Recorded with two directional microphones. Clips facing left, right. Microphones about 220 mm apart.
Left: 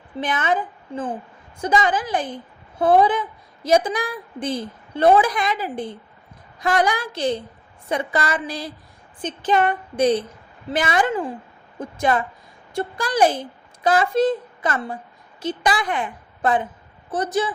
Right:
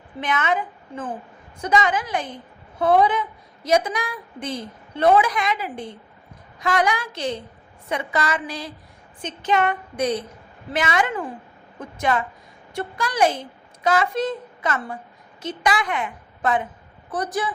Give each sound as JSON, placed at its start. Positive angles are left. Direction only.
{"t": 0.2, "sound": "a woman's voice", "side_deg": 30}